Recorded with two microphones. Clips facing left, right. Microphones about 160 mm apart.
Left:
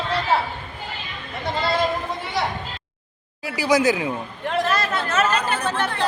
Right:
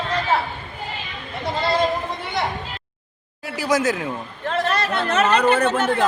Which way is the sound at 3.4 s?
Centre (ahead or behind).